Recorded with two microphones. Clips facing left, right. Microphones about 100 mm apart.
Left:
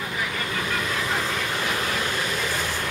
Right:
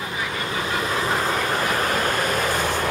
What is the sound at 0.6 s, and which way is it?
Train, 30° right (ahead or behind).